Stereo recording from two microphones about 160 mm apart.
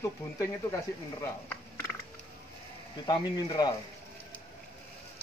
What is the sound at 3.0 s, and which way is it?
Speech, 30° left (ahead or behind).